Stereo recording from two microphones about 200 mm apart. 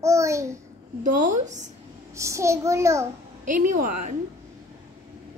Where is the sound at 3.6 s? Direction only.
40° right (ahead or behind).